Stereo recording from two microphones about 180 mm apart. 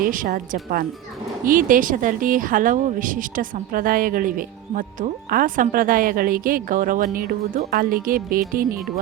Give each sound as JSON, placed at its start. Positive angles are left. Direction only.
{"t": 0.0, "sound": "speech", "side_deg": -50}